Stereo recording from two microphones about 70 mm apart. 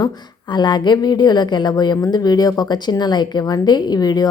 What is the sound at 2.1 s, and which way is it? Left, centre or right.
A woman's voice, left.